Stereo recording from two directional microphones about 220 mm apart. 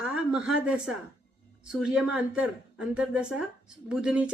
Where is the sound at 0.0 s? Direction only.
5° right (ahead or behind).